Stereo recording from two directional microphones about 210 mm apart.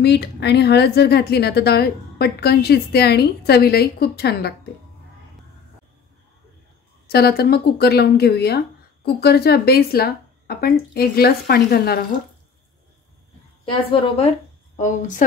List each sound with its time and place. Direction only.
0.0 s speech: 50° left (ahead or behind)
7.1 s speech: 50° left (ahead or behind)
13.7 s a woman's voice: 25° left (ahead or behind)
14.8 s a woman's voice: 35° left (ahead or behind)